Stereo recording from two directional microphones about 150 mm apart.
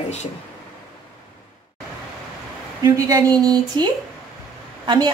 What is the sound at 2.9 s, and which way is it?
Speech, 25° right (ahead or behind).